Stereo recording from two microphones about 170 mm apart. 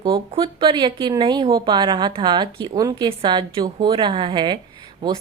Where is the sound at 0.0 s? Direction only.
30° right (ahead or behind).